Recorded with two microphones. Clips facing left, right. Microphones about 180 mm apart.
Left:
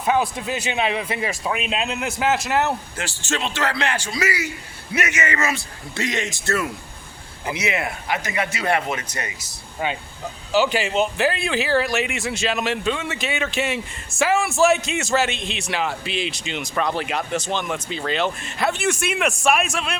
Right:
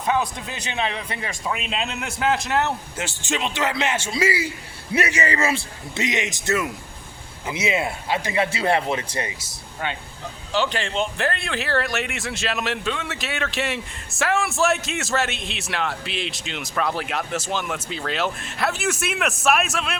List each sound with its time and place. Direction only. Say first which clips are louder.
0.0 s a man's voice: left 2 dB; 5° left (ahead or behind)
3.0 s speech: even; 20° right (ahead or behind)
9.8 s a man's voice: left 3 dB; 10° left (ahead or behind)